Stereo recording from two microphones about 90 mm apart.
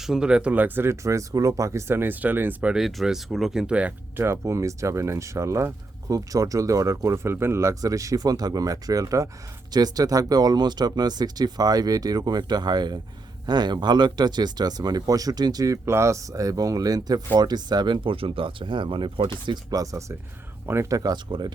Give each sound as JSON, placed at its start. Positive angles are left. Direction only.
{"t": 0.0, "sound": "speech", "side_deg": -5}
{"t": 2.7, "sound": "speech", "side_deg": -5}
{"t": 4.2, "sound": "speech", "side_deg": -35}
{"t": 19.7, "sound": "speech", "side_deg": -40}
{"t": 20.9, "sound": "speech", "side_deg": -45}